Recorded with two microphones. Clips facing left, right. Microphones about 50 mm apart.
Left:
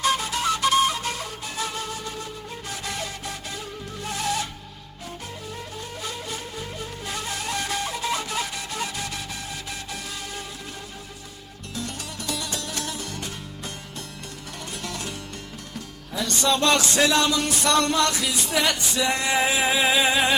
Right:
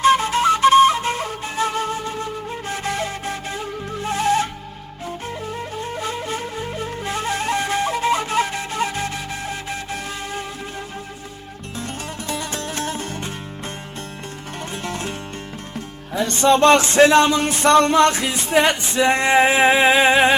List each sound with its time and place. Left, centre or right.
0.0 s flute: right
5.5 s flute: right
12.3 s music: right
14.8 s music: right
16.1 s music: right